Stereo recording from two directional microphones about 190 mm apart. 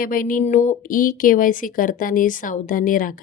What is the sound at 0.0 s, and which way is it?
Speech, 45° left (ahead or behind).